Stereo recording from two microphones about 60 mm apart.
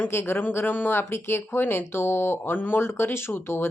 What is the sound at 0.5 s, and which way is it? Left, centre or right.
Speech, left.